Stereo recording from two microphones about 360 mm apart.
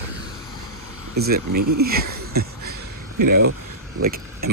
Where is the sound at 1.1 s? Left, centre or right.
Right.